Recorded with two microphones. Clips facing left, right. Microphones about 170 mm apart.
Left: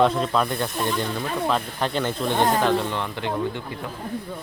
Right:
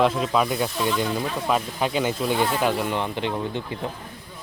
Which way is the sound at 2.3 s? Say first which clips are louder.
Left 4 dB; 45° left (ahead or behind).